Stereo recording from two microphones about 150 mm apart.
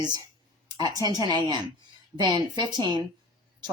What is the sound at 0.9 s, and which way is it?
Speech, 25° right (ahead or behind).